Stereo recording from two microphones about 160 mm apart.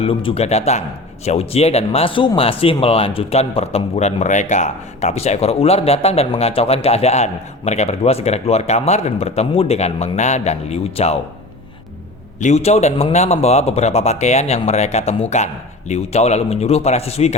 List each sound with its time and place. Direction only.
0.0 s a man's voice: 35° left (ahead or behind)
12.4 s a man's voice: 45° left (ahead or behind)